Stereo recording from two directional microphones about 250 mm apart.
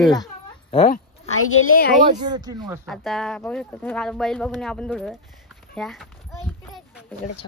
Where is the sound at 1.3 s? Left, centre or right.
Left.